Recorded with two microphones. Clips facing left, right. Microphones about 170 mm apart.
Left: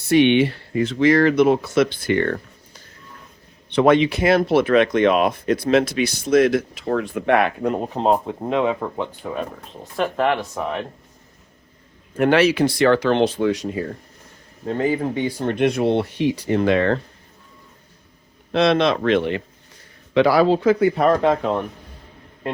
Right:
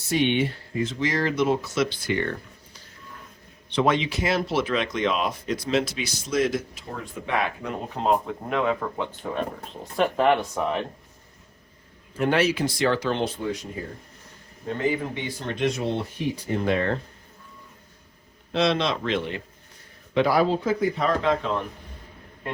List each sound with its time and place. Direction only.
0.1 s speech: 75° left (ahead or behind); by 2.3 s 55° left (ahead or behind)
3.7 s speech: 55° left (ahead or behind)
7.8 s speech: 35° left (ahead or behind)
10.0 s speech: centre (ahead or behind)
12.1 s speech: 75° left (ahead or behind)
14.8 s speech: 40° left (ahead or behind)
15.5 s speech: 60° left (ahead or behind); by 17.0 s 90° left
18.5 s speech: 60° left (ahead or behind)
20.1 s speech: 90° left; by 21.6 s 45° left (ahead or behind)